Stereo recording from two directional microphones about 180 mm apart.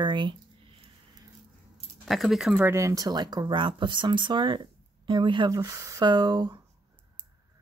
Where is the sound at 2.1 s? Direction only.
Centre (ahead or behind); by 6.6 s 25° right (ahead or behind).